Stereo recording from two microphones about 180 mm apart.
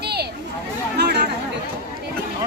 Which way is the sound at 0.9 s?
65° right (ahead or behind).